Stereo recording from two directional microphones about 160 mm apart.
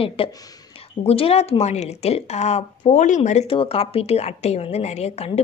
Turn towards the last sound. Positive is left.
turn(degrees=40)  # may be behind; listen again after turning